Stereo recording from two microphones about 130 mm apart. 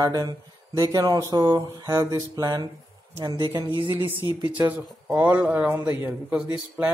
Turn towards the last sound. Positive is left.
turn(degrees=-10)  # may be behind; listen again after turning